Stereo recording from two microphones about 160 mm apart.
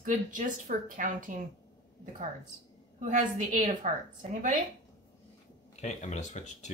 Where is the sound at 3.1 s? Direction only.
50° right (ahead or behind).